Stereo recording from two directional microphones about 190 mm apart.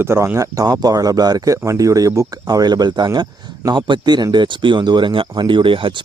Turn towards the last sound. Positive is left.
turn(degrees=-25)  # may be behind; listen again after turning